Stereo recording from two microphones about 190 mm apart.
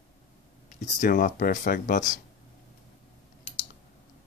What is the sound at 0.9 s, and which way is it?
Speech, 45° left (ahead or behind).